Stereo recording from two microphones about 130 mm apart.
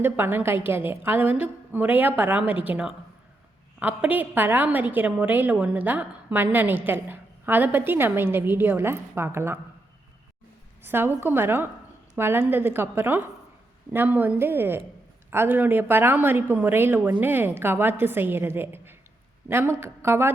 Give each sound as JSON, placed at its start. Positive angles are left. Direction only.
{"t": 0.0, "sound": "a woman's voice", "side_deg": -15}
{"t": 10.8, "sound": "a woman's voice", "side_deg": -15}